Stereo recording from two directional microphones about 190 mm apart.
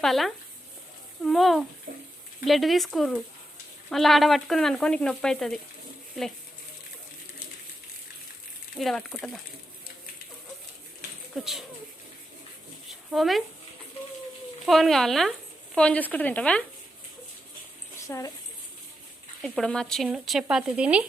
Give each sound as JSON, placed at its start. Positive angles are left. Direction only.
{"t": 0.0, "sound": "speech", "side_deg": 0}
{"t": 1.9, "sound": "speech", "side_deg": -50}
{"t": 2.4, "sound": "speech", "side_deg": 0}
{"t": 8.7, "sound": "speech", "side_deg": 0}
{"t": 11.3, "sound": "speech", "side_deg": 0}
{"t": 13.1, "sound": "speech", "side_deg": 0}
{"t": 14.6, "sound": "speech", "side_deg": 0}
{"t": 18.1, "sound": "speech", "side_deg": 15}
{"t": 19.4, "sound": "speech", "side_deg": 5}